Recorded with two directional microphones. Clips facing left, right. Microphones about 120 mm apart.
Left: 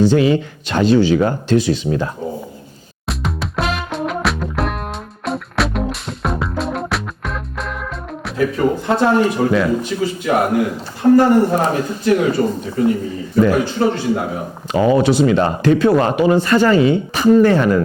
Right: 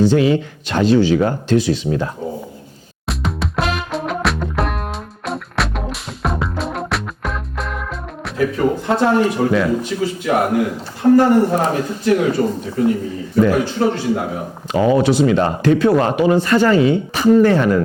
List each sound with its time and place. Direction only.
0.1 s a man's voice: 20° left (ahead or behind)
3.1 s music: centre (ahead or behind)
9.0 s a man's voice: 20° left (ahead or behind)